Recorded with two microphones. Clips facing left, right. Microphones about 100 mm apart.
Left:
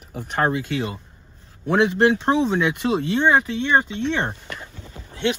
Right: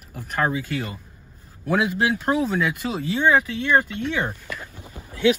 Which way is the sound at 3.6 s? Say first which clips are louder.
Even; 25° left (ahead or behind).